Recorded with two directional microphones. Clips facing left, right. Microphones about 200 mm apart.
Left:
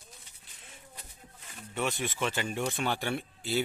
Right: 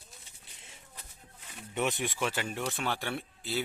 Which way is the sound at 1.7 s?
20° right (ahead or behind).